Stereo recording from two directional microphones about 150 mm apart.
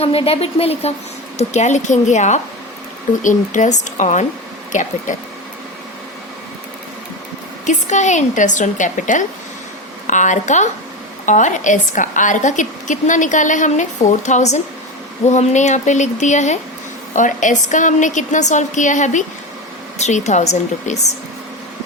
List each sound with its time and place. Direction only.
0.0 s a woman's voice: 40° left (ahead or behind); by 5.1 s 55° left (ahead or behind)
7.6 s a woman's voice: 55° left (ahead or behind)